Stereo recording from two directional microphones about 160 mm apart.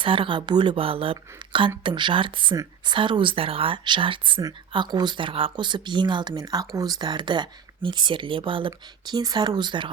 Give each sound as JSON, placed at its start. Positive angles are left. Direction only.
{"t": 0.0, "sound": "speech", "side_deg": -35}